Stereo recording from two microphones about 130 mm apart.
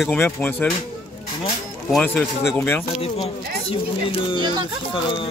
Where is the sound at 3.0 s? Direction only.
50° left (ahead or behind).